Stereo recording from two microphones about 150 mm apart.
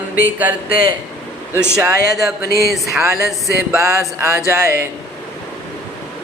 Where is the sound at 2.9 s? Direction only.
20° right (ahead or behind).